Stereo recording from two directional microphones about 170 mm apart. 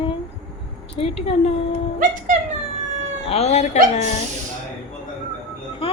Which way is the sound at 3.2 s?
40° left (ahead or behind).